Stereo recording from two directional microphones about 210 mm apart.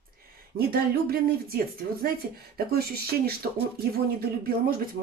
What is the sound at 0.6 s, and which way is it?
Speech, 45° right (ahead or behind).